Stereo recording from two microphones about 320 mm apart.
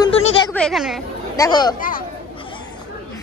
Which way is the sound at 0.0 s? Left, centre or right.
Centre.